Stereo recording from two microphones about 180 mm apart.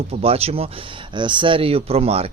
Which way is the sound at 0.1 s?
35° right (ahead or behind).